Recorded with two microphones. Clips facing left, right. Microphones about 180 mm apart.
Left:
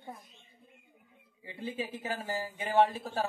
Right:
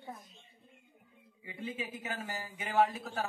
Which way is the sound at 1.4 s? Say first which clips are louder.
Left 3 dB; 30° left (ahead or behind).